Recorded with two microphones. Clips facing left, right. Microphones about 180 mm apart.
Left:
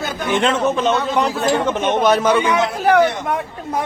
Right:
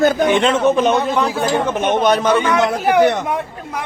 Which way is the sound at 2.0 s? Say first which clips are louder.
Even; 5° left (ahead or behind).